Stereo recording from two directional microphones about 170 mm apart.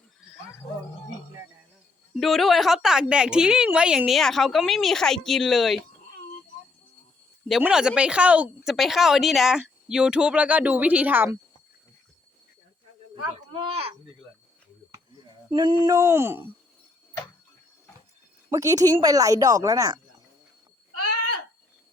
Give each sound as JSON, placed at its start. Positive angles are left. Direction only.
{"t": 2.1, "sound": "a woman's voice", "side_deg": 0}
{"t": 7.4, "sound": "speech", "side_deg": 0}
{"t": 13.7, "sound": "speech", "side_deg": -35}
{"t": 14.9, "sound": "speech", "side_deg": -25}
{"t": 18.5, "sound": "speech", "side_deg": -20}